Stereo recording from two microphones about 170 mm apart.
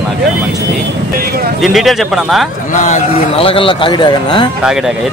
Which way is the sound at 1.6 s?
Centre (ahead or behind).